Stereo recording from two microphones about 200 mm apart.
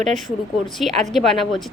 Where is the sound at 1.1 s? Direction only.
Centre (ahead or behind).